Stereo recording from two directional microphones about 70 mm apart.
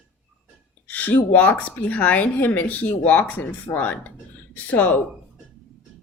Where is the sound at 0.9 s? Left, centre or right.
Left.